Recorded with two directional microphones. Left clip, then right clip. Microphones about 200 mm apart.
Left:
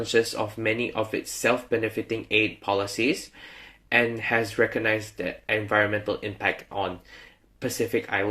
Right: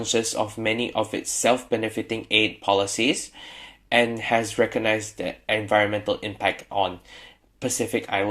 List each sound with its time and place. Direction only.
0.0 s speech: 20° right (ahead or behind)
4.2 s speech: 20° right (ahead or behind)